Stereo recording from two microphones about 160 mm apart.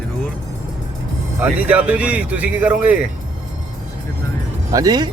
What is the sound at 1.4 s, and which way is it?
Speech, 10° right (ahead or behind).